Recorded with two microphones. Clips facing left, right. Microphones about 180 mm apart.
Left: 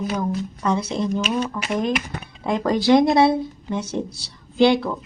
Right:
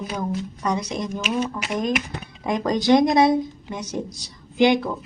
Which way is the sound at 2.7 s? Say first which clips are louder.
Left 1 dB; 20° right (ahead or behind).